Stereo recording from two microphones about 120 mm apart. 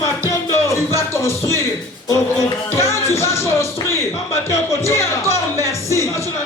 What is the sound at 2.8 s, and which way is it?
Music, 25° left (ahead or behind).